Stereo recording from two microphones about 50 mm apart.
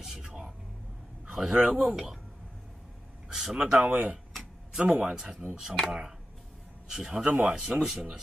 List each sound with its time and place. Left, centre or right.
0.0 s a sound: centre
1.3 s speech: centre
1.6 s speech: right
3.3 s speech: centre
4.4 s a sound: centre
5.1 s speech: centre